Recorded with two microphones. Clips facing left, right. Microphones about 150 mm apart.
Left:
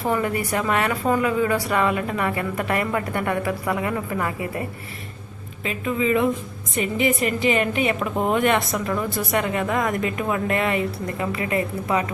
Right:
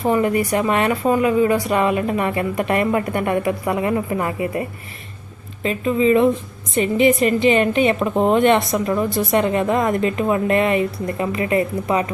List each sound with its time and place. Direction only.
0.1 s a woman's voice: 20° right (ahead or behind)
5.6 s a woman's voice: 30° right (ahead or behind)